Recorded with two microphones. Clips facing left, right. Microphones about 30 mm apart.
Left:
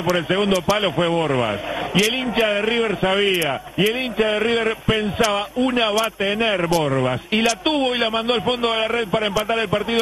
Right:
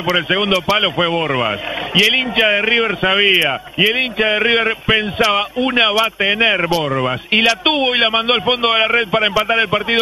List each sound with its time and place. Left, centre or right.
0.1 s a man's voice: right
1.2 s a man's voice: centre
7.3 s a man's voice: right